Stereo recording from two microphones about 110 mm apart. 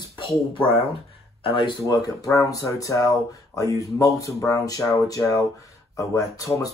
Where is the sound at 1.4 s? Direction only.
50° left (ahead or behind).